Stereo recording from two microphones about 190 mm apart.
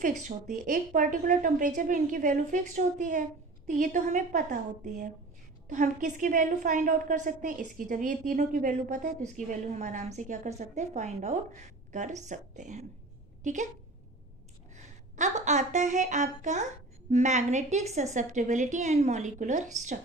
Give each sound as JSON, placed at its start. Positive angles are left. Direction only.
{"t": 0.2, "sound": "a woman's voice", "side_deg": -45}
{"t": 14.8, "sound": "a woman's voice", "side_deg": -40}